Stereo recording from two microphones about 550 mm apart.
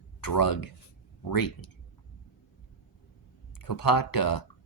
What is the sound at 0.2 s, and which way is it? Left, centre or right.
Speech, left.